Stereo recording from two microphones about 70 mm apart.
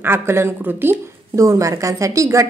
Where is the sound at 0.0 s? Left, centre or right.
Right.